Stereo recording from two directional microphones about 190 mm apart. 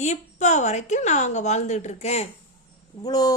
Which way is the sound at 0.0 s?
40° left (ahead or behind).